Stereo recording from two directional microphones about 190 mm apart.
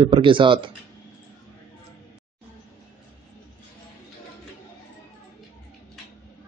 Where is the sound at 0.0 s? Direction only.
25° right (ahead or behind).